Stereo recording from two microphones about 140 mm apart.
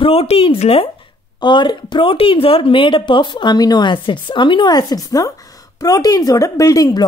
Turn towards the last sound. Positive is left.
turn(degrees=25)  # may be behind; listen again after turning